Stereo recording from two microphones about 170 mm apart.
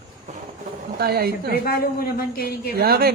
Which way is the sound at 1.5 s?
65° left (ahead or behind).